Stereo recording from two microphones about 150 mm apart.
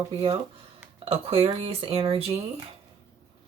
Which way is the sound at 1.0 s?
40° right (ahead or behind).